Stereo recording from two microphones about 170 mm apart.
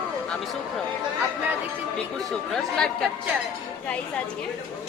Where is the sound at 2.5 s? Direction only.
5° left (ahead or behind).